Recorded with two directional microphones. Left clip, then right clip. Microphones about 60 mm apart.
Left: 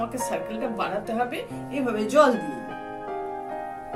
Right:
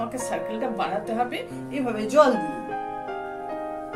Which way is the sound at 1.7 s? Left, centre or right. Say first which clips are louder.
Even; left.